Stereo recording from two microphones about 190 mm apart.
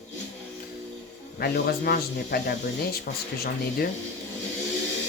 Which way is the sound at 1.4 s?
55° left (ahead or behind).